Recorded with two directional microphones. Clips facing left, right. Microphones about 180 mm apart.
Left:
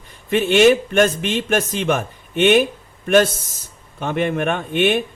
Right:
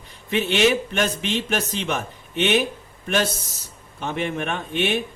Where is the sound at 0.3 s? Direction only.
50° left (ahead or behind).